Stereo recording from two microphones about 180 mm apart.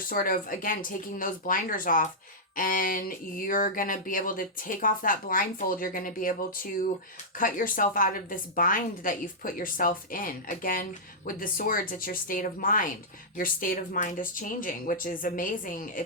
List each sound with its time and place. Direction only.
0.1 s speech: 50° left (ahead or behind)
7.3 s speech: 50° left (ahead or behind)